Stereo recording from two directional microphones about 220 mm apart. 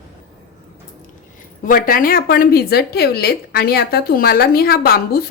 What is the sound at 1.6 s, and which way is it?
A woman's voice, 40° left (ahead or behind).